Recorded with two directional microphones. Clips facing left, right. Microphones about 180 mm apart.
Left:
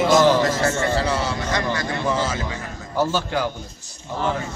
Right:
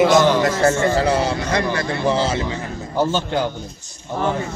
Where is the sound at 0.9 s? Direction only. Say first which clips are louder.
Right 5 dB; 40° right (ahead or behind).